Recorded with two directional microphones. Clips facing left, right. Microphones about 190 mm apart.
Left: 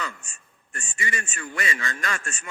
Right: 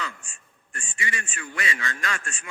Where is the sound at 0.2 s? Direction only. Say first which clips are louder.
Even; 45° left (ahead or behind).